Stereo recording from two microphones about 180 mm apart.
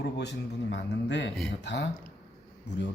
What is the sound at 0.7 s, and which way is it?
Speech, 80° left.